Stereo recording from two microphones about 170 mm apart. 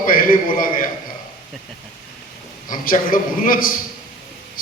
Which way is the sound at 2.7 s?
55° left (ahead or behind).